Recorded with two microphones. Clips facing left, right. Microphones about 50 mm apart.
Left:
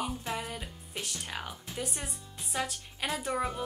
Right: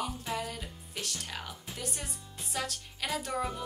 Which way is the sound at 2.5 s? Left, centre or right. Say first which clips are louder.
Left 2 dB; centre.